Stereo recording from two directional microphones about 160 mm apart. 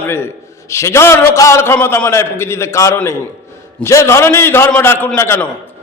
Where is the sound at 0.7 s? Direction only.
15° left (ahead or behind).